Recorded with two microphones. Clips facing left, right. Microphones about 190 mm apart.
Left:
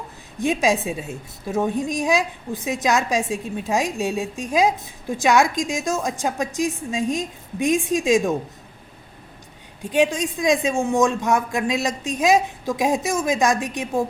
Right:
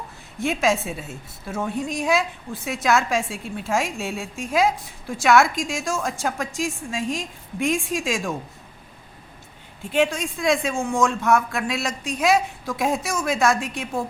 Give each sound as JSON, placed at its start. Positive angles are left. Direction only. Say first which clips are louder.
{"t": 0.3, "sound": "a woman's voice", "louder": "left 2 dB", "side_deg": 20}
{"t": 9.9, "sound": "a woman's voice", "louder": "left 2 dB", "side_deg": 20}